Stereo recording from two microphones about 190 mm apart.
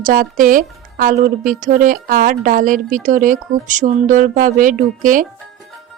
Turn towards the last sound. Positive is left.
turn(degrees=-45)  # may be behind; listen again after turning